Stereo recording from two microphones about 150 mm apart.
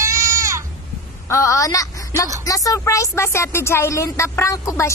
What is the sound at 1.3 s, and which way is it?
A woman's voice, 20° left (ahead or behind).